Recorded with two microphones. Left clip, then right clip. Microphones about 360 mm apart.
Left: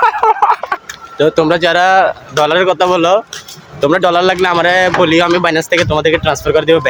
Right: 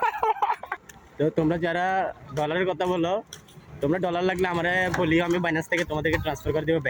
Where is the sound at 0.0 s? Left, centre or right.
Right.